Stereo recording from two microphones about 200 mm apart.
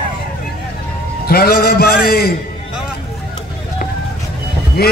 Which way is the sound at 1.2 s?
50° left (ahead or behind).